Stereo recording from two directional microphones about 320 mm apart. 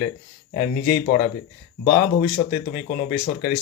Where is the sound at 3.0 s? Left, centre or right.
Left.